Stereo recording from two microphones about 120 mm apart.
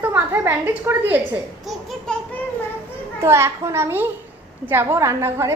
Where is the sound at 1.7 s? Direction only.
Centre (ahead or behind).